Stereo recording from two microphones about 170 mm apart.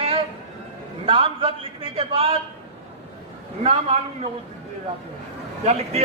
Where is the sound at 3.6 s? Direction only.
35° right (ahead or behind).